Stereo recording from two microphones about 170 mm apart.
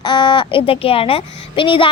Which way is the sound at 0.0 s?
30° left (ahead or behind).